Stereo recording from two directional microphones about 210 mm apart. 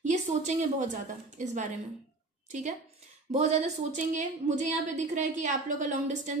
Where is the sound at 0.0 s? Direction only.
35° right (ahead or behind).